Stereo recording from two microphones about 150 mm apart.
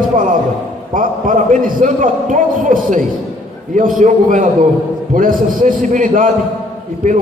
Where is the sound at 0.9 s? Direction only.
60° right (ahead or behind).